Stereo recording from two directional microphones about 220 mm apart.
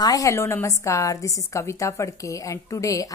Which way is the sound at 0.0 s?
15° left (ahead or behind).